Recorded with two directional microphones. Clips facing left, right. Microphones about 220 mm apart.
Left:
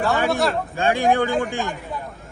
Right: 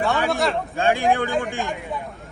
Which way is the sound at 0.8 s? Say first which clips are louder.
Left 1 dB; 40° left (ahead or behind).